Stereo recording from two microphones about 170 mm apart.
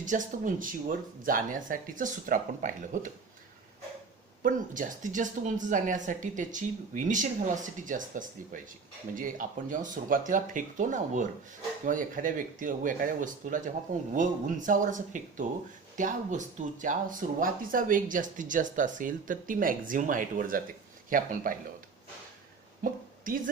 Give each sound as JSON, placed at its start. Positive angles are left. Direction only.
{"t": 0.0, "sound": "speech", "side_deg": -50}
{"t": 4.4, "sound": "speech", "side_deg": -50}
{"t": 22.8, "sound": "a sound", "side_deg": -55}